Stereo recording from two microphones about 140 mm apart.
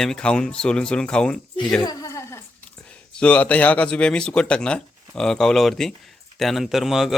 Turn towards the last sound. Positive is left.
turn(degrees=0)  # may be behind; listen again after turning